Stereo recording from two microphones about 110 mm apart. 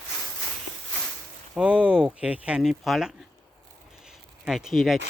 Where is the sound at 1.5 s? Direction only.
10° right (ahead or behind).